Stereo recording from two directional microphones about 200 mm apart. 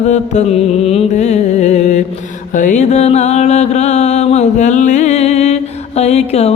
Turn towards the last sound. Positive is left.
turn(degrees=30)  # may be behind; listen again after turning